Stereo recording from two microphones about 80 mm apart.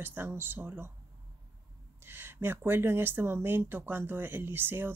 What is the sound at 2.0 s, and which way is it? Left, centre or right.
Speech, right.